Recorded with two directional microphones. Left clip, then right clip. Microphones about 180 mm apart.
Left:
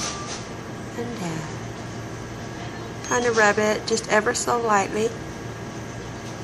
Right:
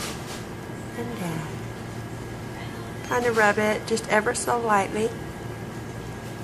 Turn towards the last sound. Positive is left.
turn(degrees=-5)  # may be behind; listen again after turning